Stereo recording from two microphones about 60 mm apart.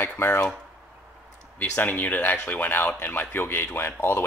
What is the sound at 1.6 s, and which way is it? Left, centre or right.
Speech, left.